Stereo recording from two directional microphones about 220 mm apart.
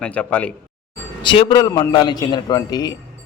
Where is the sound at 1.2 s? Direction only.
20° left (ahead or behind).